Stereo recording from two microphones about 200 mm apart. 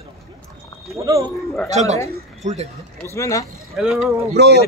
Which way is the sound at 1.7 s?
35° right (ahead or behind).